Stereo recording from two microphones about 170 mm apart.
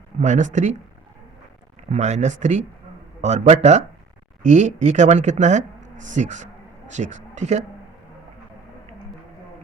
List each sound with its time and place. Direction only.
0.2 s speech: 45° right (ahead or behind)
1.9 s a man's voice: 45° right (ahead or behind)